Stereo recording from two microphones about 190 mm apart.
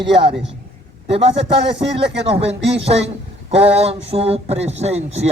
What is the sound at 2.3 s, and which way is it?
Speech, 30° right (ahead or behind).